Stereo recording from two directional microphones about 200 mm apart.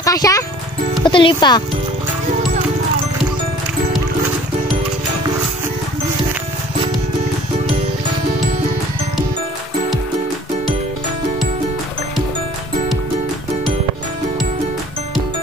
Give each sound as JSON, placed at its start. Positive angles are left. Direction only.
{"t": 0.0, "sound": "music", "side_deg": 15}
{"t": 1.0, "sound": "speech", "side_deg": 25}